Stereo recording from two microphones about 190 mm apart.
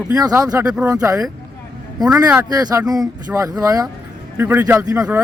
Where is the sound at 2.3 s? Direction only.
20° right (ahead or behind).